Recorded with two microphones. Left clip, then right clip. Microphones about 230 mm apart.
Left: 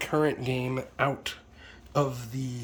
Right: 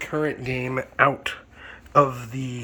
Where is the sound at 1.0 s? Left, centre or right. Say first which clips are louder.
Right 9 dB; right.